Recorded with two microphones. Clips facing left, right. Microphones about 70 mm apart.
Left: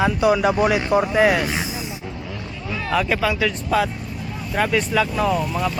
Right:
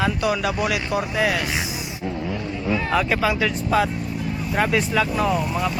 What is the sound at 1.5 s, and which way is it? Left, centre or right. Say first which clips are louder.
Speech: left 1 dB; centre.